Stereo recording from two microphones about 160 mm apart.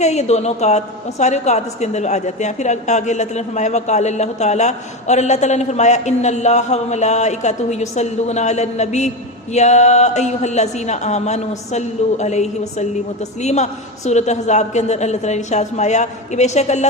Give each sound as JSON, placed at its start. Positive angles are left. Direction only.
{"t": 0.0, "sound": "a woman's voice", "side_deg": 45}